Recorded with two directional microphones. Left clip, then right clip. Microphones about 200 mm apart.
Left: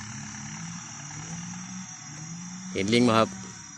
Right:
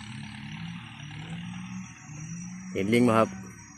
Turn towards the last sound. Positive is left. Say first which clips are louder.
# left 1 dB
turn(degrees=0)  # may be behind; listen again after turning